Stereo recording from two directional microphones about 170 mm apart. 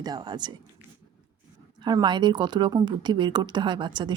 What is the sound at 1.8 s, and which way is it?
Speech, 25° right (ahead or behind).